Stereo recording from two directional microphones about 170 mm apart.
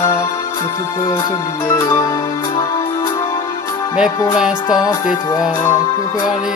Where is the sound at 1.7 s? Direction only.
20° left (ahead or behind).